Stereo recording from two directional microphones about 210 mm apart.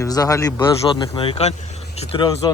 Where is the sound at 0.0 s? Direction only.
15° left (ahead or behind).